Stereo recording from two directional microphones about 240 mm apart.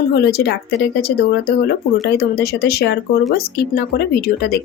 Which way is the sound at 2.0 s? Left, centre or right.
Left.